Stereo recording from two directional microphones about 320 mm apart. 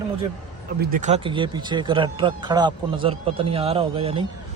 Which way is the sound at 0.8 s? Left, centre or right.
Right.